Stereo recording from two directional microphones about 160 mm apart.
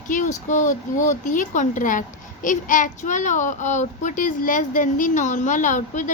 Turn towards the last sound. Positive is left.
turn(degrees=50)  # may be behind; listen again after turning